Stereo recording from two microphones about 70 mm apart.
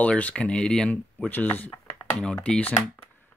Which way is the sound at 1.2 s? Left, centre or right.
Left.